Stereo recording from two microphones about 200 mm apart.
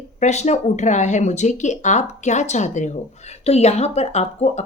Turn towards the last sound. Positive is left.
turn(degrees=35)  # may be behind; listen again after turning